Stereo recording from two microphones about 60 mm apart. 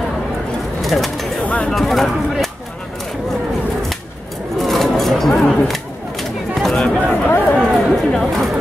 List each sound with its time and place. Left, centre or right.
0.8 s speech: centre
1.4 s bird: left
1.7 s speech: centre
4.6 s a sound: centre
5.3 s speech: centre
6.5 s a sound: centre
7.1 s speech: left
7.7 s speech: centre